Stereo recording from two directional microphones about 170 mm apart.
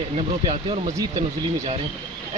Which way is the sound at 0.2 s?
35° right (ahead or behind).